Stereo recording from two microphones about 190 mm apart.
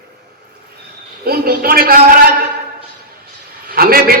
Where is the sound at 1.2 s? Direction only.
50° right (ahead or behind).